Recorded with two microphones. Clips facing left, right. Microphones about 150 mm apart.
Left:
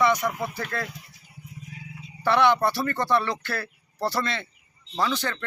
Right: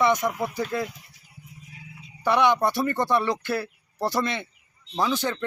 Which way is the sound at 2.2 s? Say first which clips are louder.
Even; 15° right (ahead or behind).